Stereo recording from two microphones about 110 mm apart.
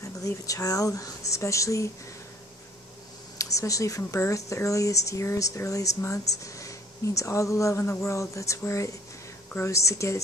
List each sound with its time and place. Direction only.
0.0 s speech: 30° left (ahead or behind)
3.3 s speech: 30° left (ahead or behind)